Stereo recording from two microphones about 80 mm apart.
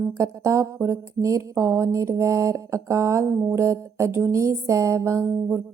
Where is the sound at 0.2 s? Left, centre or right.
Right.